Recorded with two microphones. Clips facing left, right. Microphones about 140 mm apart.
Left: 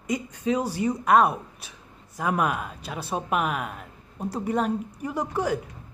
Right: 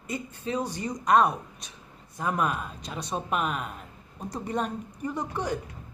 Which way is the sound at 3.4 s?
65° left (ahead or behind).